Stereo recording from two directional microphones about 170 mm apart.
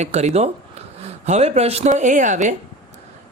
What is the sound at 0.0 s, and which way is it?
Speech, 40° right (ahead or behind).